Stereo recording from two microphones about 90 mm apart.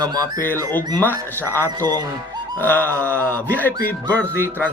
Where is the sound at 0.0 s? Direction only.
40° right (ahead or behind).